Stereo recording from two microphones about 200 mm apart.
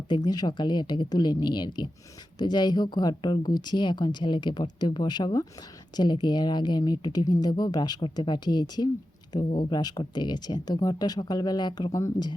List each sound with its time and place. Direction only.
0.1 s speech: 20° left (ahead or behind)